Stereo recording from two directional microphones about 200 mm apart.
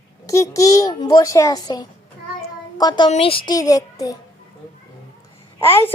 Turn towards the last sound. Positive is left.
turn(degrees=10)  # may be behind; listen again after turning